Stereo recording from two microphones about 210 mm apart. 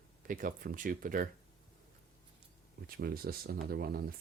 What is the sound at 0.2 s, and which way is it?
Speech, 40° right (ahead or behind).